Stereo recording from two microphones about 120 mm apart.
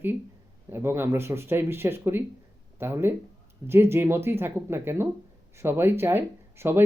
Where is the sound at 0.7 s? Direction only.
20° right (ahead or behind).